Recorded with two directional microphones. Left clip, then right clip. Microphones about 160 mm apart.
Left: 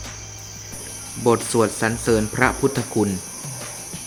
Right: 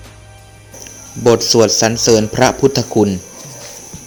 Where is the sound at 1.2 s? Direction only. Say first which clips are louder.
Right 8 dB; 25° right (ahead or behind).